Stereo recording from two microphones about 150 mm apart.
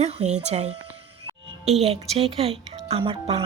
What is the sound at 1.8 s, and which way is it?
Speech, 40° right (ahead or behind).